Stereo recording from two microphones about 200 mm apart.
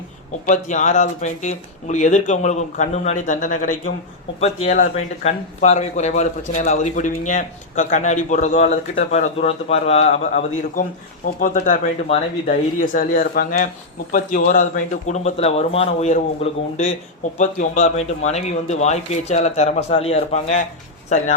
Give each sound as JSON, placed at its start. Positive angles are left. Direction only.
{"t": 0.4, "sound": "a man's voice", "side_deg": 40}